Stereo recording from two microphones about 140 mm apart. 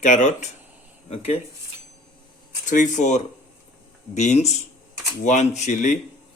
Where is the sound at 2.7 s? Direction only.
60° left (ahead or behind).